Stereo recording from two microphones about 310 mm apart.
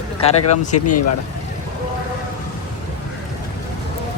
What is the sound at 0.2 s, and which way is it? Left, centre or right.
Speech, left.